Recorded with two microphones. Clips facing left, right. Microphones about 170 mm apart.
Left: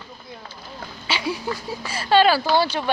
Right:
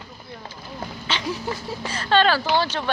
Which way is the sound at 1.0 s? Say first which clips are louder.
Left 2 dB; 10° left (ahead or behind).